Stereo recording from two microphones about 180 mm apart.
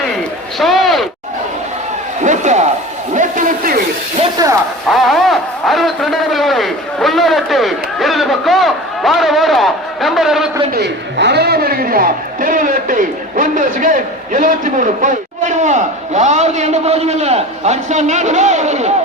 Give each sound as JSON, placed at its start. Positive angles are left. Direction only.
{"t": 0.6, "sound": "a sound", "side_deg": 0}
{"t": 2.2, "sound": "a man's voice", "side_deg": -40}
{"t": 4.4, "sound": "speech", "side_deg": -20}
{"t": 4.9, "sound": "a man's voice", "side_deg": 0}
{"t": 10.8, "sound": "a man's voice", "side_deg": -70}